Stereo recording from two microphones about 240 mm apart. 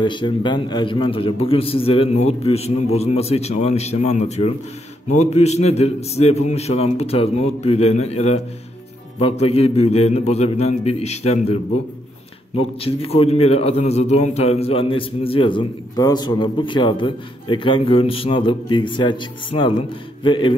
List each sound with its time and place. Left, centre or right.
0.0 s a man's voice: centre